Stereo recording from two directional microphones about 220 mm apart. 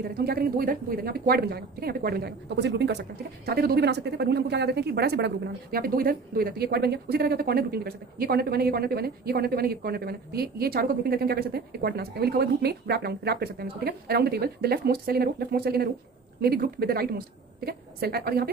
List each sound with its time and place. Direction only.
0.1 s a woman's voice: 45° right (ahead or behind)